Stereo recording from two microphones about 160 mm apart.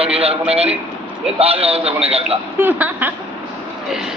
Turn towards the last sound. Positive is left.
turn(degrees=-10)  # may be behind; listen again after turning